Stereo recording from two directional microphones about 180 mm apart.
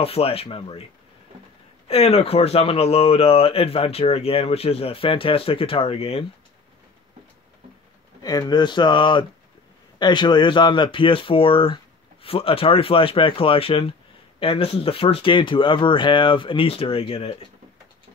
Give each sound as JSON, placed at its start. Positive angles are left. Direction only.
{"t": 0.0, "sound": "speech", "side_deg": 35}
{"t": 1.9, "sound": "speech", "side_deg": 35}
{"t": 8.2, "sound": "speech", "side_deg": 20}